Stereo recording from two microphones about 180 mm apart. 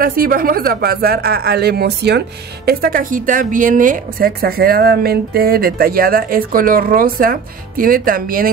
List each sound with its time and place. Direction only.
0.0 s speech: 55° right (ahead or behind)